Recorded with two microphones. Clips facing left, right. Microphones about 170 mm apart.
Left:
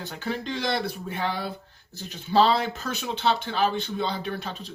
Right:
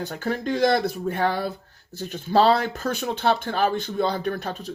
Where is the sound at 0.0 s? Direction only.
50° right (ahead or behind).